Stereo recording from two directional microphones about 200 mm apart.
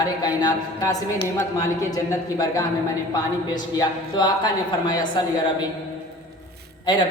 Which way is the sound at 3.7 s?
20° left (ahead or behind).